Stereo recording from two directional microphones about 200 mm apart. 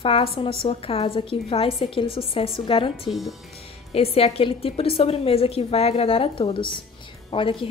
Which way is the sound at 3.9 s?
30° left (ahead or behind).